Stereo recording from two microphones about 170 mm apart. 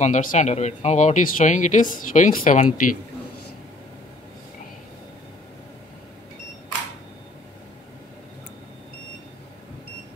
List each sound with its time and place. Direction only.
0.0 s speech: 50° left (ahead or behind)